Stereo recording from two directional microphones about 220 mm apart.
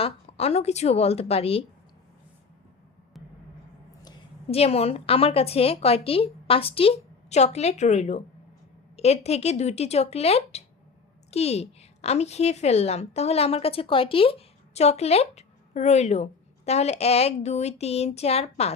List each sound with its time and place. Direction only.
0.0 s a woman's voice: 25° left (ahead or behind)
4.5 s a woman's voice: 30° left (ahead or behind)